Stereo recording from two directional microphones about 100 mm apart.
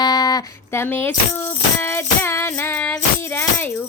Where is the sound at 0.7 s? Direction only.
20° left (ahead or behind).